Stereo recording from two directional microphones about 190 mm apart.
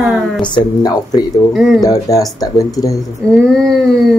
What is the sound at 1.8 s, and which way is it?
Speech, 20° left (ahead or behind).